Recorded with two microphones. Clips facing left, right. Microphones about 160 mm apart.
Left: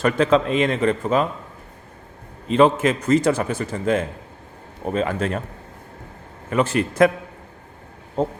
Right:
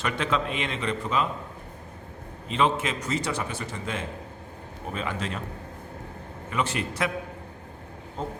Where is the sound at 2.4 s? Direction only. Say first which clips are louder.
Left 9 dB; 45° left (ahead or behind).